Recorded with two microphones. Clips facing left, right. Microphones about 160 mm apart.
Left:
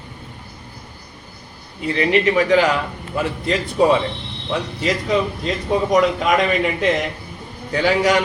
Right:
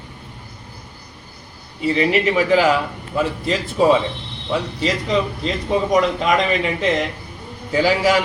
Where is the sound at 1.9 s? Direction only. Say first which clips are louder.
Left 2 dB; 5° right (ahead or behind).